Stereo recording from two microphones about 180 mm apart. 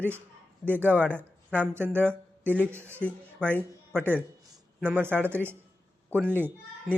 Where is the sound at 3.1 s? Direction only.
5° left (ahead or behind).